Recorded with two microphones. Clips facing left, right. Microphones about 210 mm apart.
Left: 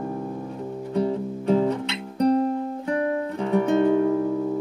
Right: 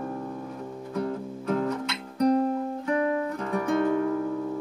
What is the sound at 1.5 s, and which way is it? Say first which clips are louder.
Music: left 6 dB; 30° left (ahead or behind).